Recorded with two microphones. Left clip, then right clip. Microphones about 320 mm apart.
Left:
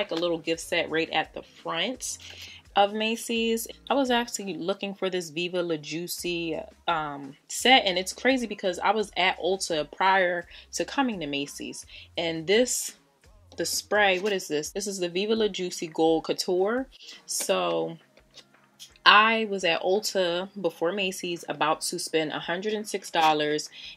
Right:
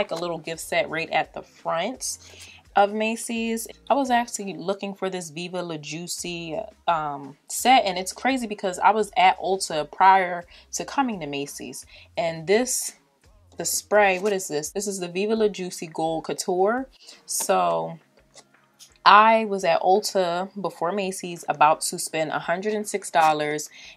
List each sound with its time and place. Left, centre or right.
0.0 s speech: right
19.0 s speech: right